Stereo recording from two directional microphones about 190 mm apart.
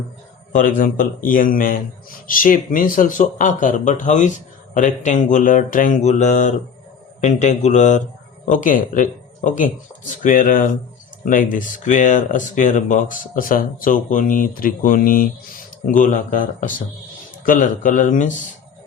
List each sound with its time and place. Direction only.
0.5 s speech: 45° left (ahead or behind)
4.7 s mantra: 40° left (ahead or behind)
8.4 s speech: 45° left (ahead or behind)